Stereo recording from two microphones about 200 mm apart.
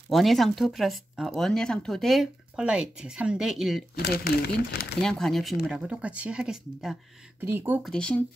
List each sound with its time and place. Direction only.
0.1 s speech: centre (ahead or behind)
3.9 s speech: 50° left (ahead or behind)
5.0 s speech: centre (ahead or behind)
7.8 s speech: 5° left (ahead or behind)